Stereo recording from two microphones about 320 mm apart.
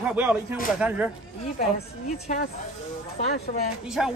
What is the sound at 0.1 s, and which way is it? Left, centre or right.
Speech, centre.